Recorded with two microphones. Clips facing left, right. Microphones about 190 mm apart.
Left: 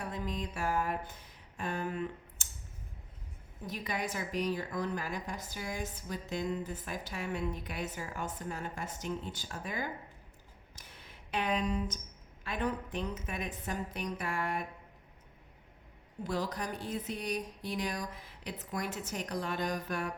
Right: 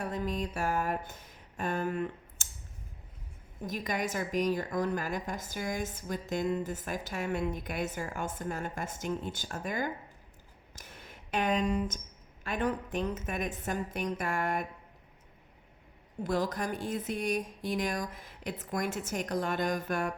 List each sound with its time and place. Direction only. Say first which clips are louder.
0.0 s music: right 4 dB; 45° right (ahead or behind)
1.5 s a sound: right 4 dB; 45° right (ahead or behind)
3.8 s a woman's voice: right 3 dB; 45° right (ahead or behind)
10.8 s a sound: right 5 dB; 45° right (ahead or behind)
12.5 s a woman's voice: right 3 dB; 45° right (ahead or behind)
16.2 s a woman's voice: right 4 dB; 50° right (ahead or behind)